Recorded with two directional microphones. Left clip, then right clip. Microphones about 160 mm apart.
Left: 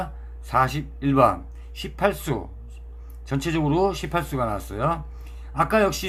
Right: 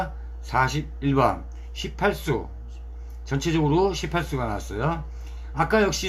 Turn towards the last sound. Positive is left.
turn(degrees=20)  # may be behind; listen again after turning